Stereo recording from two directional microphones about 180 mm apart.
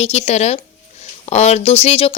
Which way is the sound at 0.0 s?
35° left (ahead or behind).